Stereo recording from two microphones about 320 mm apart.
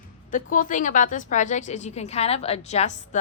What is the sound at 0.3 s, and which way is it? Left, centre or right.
A woman's voice, left.